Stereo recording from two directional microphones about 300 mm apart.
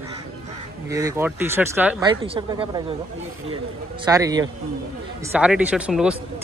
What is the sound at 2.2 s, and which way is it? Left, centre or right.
Speech, centre.